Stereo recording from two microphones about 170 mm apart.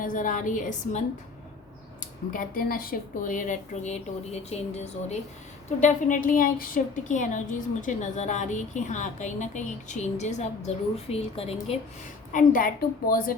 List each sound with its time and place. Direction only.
0.0 s a woman's voice: 50° left (ahead or behind)
2.3 s a woman's voice: 55° left (ahead or behind); by 4.6 s 40° left (ahead or behind)
5.6 s a woman's voice: 45° left (ahead or behind)
12.3 s a woman's voice: 50° left (ahead or behind)